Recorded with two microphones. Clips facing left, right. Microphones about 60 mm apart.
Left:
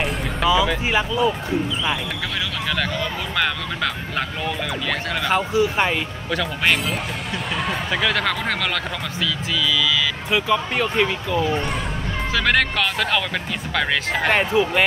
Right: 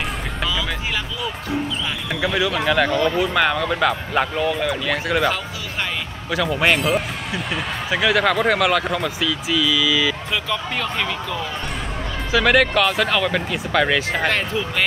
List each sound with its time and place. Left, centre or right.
2.2 s speech: centre
5.3 s speech: left
6.3 s speech: centre
10.3 s speech: centre
12.3 s speech: centre
14.3 s speech: centre